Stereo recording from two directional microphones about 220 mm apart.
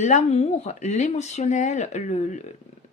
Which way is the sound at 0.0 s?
35° left (ahead or behind).